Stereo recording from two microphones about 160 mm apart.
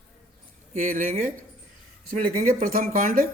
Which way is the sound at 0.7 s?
55° right (ahead or behind).